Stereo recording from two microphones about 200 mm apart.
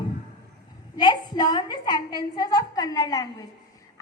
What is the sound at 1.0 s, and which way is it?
A woman's voice, 20° left (ahead or behind).